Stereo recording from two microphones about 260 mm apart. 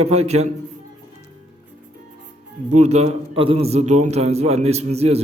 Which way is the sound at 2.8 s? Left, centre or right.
Right.